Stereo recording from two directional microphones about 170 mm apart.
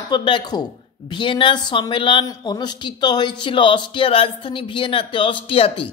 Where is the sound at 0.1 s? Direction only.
25° left (ahead or behind).